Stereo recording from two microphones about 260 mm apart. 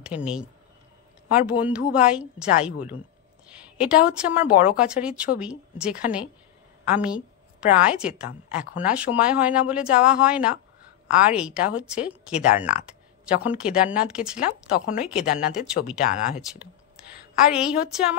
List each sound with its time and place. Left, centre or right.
0.0 s a woman's voice: centre
16.1 s speech: left
17.5 s speech: centre